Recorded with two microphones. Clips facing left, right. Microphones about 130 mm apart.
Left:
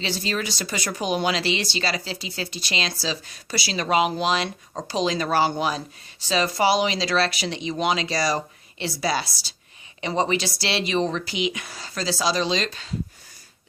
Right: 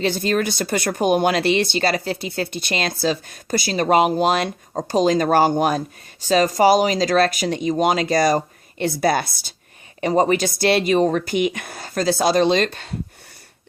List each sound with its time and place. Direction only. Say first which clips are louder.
0.0 s speech: right 7 dB; 50° right (ahead or behind)